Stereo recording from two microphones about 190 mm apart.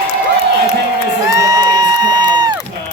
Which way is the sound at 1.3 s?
20° right (ahead or behind).